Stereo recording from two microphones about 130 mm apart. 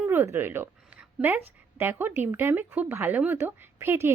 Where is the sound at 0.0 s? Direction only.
15° right (ahead or behind).